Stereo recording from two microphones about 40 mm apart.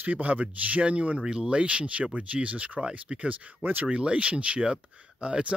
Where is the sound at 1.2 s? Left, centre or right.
Right.